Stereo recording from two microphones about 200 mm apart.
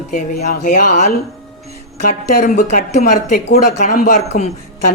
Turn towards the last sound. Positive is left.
turn(degrees=35)  # may be behind; listen again after turning